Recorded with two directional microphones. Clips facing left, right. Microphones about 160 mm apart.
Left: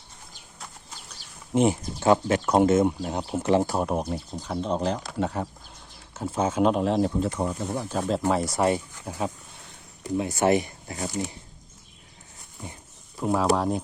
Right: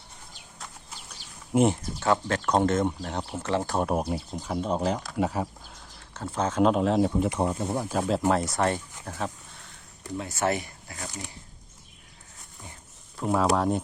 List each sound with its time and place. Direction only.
1.5 s speech: 5° right (ahead or behind)
2.0 s speech: 15° left (ahead or behind)
3.8 s speech: 5° right (ahead or behind)
6.1 s speech: 10° left (ahead or behind)
7.7 s speech: 10° right (ahead or behind); by 11.3 s 25° left (ahead or behind)
12.6 s speech: 20° left (ahead or behind)
13.1 s speech: centre (ahead or behind)